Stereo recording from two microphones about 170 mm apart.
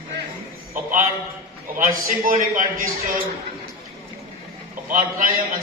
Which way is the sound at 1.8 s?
50° right (ahead or behind).